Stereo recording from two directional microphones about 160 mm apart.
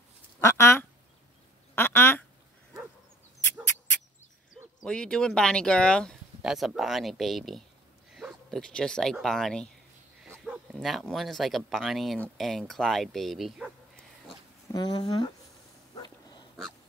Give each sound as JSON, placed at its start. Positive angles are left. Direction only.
{"t": 0.4, "sound": "speech", "side_deg": 15}
{"t": 1.8, "sound": "quack", "side_deg": 15}
{"t": 4.8, "sound": "speech", "side_deg": 5}
{"t": 14.7, "sound": "speech", "side_deg": 25}
{"t": 15.9, "sound": "dog", "side_deg": 25}